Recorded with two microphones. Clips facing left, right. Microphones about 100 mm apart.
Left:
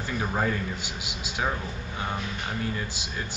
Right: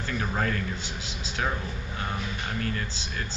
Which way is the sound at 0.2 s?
15° left (ahead or behind).